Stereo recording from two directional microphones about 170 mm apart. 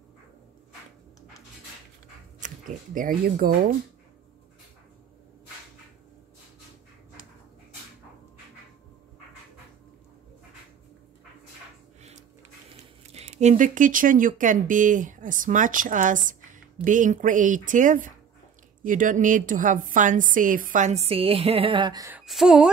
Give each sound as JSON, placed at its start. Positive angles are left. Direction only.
{"t": 2.4, "sound": "speech", "side_deg": -50}
{"t": 13.1, "sound": "speech", "side_deg": -40}
{"t": 22.2, "sound": "a woman's voice", "side_deg": 0}